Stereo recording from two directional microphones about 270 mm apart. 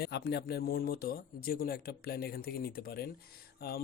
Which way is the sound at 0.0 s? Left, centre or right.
Left.